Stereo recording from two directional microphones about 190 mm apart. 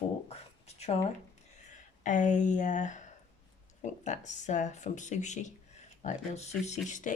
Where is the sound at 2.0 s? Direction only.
40° left (ahead or behind).